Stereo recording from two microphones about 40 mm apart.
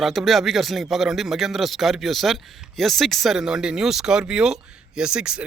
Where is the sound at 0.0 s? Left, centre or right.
Centre.